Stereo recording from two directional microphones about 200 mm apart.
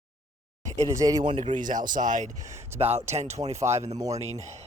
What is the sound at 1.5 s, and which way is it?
Speech, 40° right (ahead or behind).